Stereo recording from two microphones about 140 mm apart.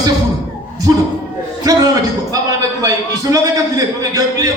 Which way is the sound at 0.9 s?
25° right (ahead or behind).